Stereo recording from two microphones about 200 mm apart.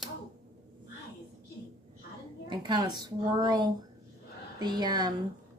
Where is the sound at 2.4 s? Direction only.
20° right (ahead or behind).